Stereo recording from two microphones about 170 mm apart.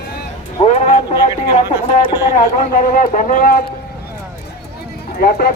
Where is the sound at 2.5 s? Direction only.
50° left (ahead or behind).